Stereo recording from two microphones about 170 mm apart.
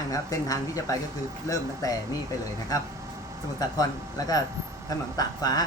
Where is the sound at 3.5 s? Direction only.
20° left (ahead or behind).